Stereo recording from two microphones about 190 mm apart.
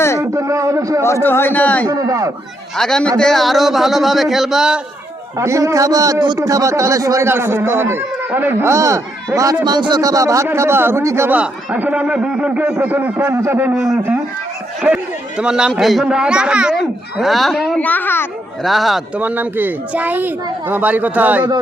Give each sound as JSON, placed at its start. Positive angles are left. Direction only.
{"t": 0.2, "sound": "a man's voice", "side_deg": -15}
{"t": 1.0, "sound": "a man's voice", "side_deg": 10}
{"t": 1.9, "sound": "a man's voice", "side_deg": -20}
{"t": 2.7, "sound": "speech", "side_deg": 5}
{"t": 5.4, "sound": "a man's voice", "side_deg": -15}
{"t": 18.6, "sound": "a man's voice", "side_deg": 0}